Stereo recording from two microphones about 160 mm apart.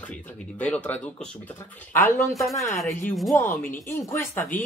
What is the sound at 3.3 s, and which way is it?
Speech, 15° left (ahead or behind).